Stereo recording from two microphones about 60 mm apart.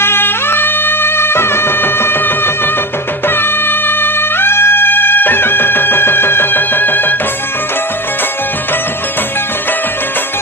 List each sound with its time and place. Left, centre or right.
0.0 s music: left